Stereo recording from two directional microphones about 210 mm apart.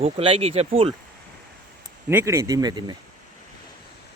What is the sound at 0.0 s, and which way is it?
Speech, 30° right (ahead or behind).